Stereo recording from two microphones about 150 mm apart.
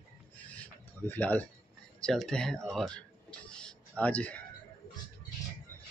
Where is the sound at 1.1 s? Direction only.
10° left (ahead or behind).